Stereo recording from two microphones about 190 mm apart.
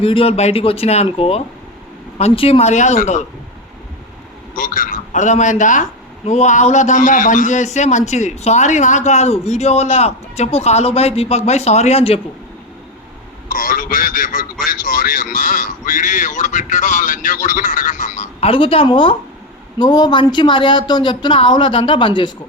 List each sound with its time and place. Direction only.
0.0 s a man's voice: 30° left (ahead or behind)
4.5 s a man's voice: 45° left (ahead or behind)
13.5 s a man's voice: 45° left (ahead or behind); by 22.3 s 25° left (ahead or behind)